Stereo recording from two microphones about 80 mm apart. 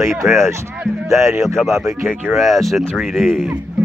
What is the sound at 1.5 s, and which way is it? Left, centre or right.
Speech, centre.